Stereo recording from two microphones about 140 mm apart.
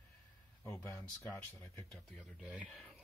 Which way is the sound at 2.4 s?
Centre (ahead or behind).